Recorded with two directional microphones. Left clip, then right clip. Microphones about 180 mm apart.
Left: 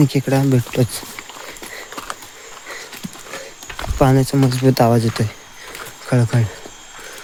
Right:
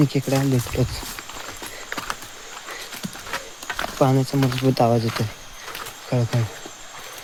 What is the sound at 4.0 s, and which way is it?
Speech, 40° left (ahead or behind).